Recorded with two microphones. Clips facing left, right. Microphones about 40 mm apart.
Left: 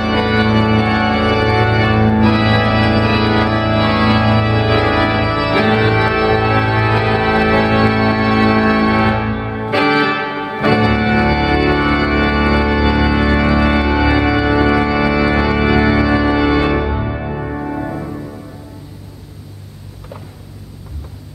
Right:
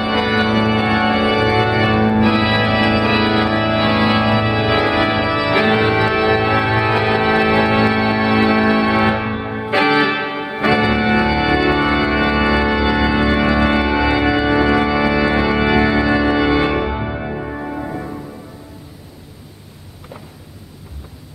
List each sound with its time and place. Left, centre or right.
0.0 s organ: centre
9.7 s music: centre
10.9 s organ: centre
17.3 s music: centre